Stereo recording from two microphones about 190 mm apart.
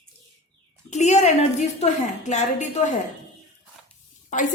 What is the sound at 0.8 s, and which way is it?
A woman's voice, 35° left (ahead or behind).